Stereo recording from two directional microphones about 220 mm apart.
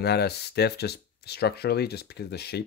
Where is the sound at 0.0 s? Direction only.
45° left (ahead or behind).